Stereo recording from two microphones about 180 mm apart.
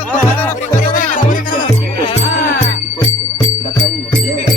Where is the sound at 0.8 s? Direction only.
50° left (ahead or behind).